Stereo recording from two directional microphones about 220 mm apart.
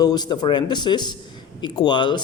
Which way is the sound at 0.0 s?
20° left (ahead or behind).